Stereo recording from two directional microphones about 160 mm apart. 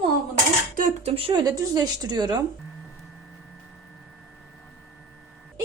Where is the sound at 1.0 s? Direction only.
35° right (ahead or behind).